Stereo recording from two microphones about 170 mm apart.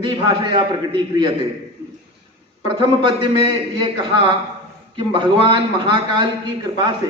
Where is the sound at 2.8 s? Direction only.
30° right (ahead or behind).